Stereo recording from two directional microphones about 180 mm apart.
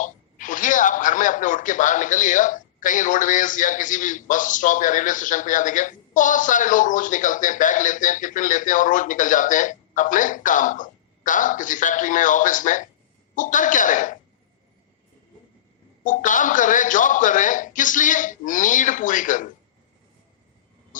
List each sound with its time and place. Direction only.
0.0 s a man's voice: 45° left (ahead or behind)
16.0 s a man's voice: 45° left (ahead or behind)